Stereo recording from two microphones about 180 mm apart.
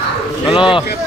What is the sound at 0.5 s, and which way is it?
Speech, 25° left (ahead or behind).